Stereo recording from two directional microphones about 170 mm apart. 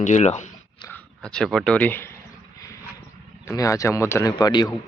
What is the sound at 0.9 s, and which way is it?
Speech, 10° left (ahead or behind).